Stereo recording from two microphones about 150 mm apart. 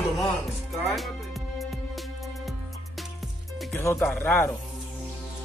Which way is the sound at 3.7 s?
15° left (ahead or behind).